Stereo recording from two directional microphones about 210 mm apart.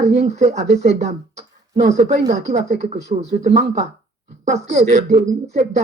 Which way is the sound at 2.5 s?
30° right (ahead or behind).